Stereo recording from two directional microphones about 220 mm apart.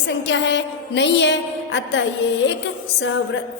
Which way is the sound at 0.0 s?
55° left (ahead or behind).